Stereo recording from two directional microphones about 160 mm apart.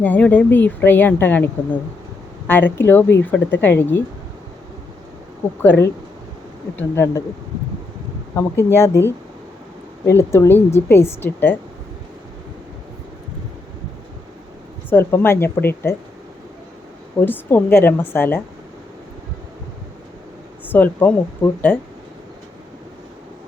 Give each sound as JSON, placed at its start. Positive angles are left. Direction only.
{"t": 0.0, "sound": "speech", "side_deg": 10}
{"t": 2.5, "sound": "speech", "side_deg": 15}
{"t": 5.6, "sound": "speech", "side_deg": 15}
{"t": 8.4, "sound": "speech", "side_deg": 15}
{"t": 14.8, "sound": "speech", "side_deg": 15}
{"t": 17.2, "sound": "speech", "side_deg": 15}
{"t": 20.7, "sound": "speech", "side_deg": 10}